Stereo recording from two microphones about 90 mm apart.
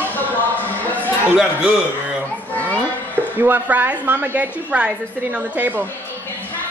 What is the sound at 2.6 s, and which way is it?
Children playing, 15° left (ahead or behind).